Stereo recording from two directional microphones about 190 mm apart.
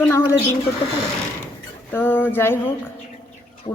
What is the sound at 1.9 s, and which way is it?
Speech, 10° left (ahead or behind).